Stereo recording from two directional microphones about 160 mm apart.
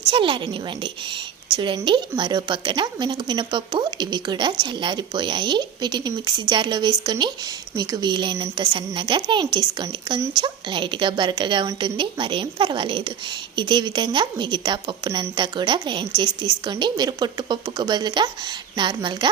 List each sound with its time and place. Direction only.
0.1 s a woman's voice: 30° right (ahead or behind)